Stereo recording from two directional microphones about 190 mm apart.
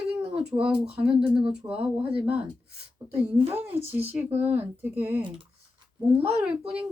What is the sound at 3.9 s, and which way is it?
Speech, 10° right (ahead or behind).